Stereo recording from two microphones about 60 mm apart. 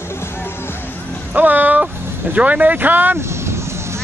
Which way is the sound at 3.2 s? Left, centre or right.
Right.